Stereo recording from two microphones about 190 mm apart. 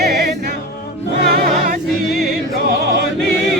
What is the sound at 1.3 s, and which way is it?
Choir, 50° right (ahead or behind).